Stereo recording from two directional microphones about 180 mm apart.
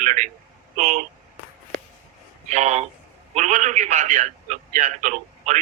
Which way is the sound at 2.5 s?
40° right (ahead or behind).